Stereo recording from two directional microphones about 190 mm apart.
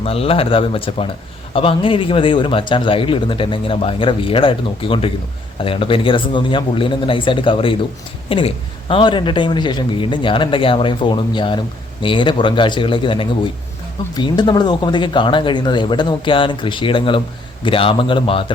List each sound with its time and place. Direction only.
0.0 s speech: 30° left (ahead or behind)